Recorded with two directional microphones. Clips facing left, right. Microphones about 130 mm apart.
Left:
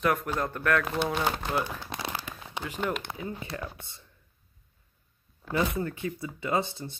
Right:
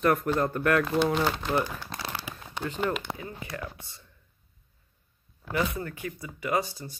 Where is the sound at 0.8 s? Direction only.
10° left (ahead or behind).